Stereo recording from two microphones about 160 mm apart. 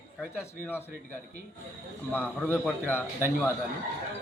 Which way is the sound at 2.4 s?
10° left (ahead or behind).